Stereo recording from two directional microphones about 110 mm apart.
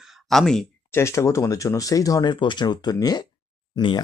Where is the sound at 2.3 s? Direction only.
45° left (ahead or behind).